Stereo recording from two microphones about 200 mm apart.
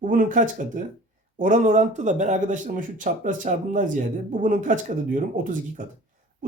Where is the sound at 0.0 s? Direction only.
40° right (ahead or behind).